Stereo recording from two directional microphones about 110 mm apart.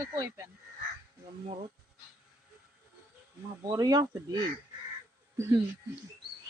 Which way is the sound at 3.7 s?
35° right (ahead or behind).